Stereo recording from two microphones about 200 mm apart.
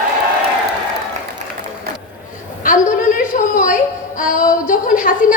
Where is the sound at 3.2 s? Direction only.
40° left (ahead or behind).